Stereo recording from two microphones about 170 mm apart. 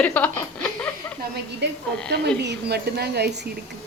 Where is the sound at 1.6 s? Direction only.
80° right.